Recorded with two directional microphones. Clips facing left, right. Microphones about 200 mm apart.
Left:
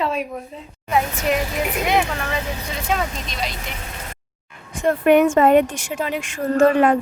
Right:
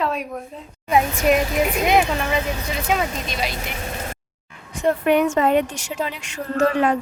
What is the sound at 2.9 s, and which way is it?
Speech, 5° right (ahead or behind).